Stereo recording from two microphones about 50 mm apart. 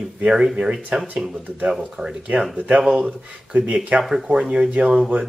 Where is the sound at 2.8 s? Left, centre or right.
Centre.